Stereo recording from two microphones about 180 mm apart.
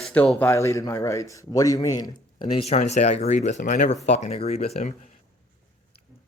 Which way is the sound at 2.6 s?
35° left (ahead or behind).